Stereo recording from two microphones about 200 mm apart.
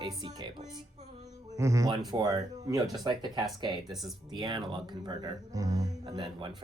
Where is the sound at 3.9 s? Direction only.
Centre (ahead or behind).